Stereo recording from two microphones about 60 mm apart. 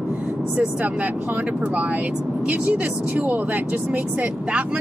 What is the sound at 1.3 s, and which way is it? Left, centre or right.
Speech, right.